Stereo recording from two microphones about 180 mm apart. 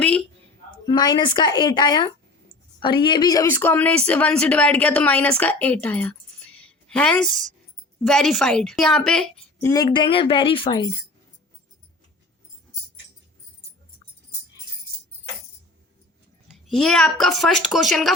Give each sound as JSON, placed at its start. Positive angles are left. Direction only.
{"t": 0.9, "sound": "speech", "side_deg": 25}
{"t": 6.6, "sound": "a sound", "side_deg": 5}
{"t": 8.0, "sound": "a woman's voice", "side_deg": 0}
{"t": 9.6, "sound": "speech", "side_deg": 20}
{"t": 16.6, "sound": "a woman's voice", "side_deg": 0}